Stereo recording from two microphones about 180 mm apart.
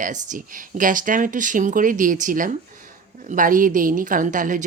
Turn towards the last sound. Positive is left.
turn(degrees=-45)  # may be behind; listen again after turning